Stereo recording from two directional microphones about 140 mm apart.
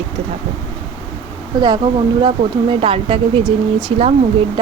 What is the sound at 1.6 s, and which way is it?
Speech, 35° right (ahead or behind).